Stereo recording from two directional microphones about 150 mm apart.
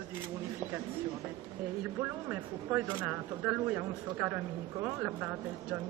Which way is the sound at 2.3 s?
10° right (ahead or behind).